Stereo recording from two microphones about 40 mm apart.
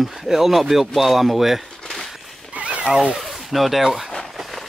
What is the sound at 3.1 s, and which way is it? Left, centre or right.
Speech, centre.